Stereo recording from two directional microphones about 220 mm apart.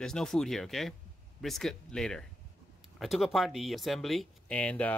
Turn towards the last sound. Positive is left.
turn(degrees=5)  # may be behind; listen again after turning